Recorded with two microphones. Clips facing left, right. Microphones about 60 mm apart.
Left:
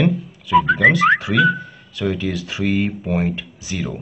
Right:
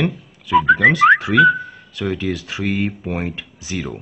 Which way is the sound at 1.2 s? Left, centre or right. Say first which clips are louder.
Right 4 dB; right.